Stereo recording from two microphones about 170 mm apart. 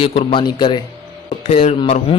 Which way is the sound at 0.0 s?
35° left (ahead or behind).